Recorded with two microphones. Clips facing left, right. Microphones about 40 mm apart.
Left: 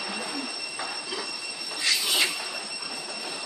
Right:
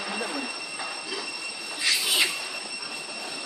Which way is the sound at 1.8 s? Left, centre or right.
Centre.